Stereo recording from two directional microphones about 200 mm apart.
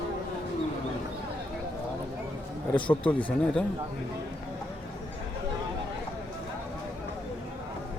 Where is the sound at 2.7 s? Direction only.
5° left (ahead or behind).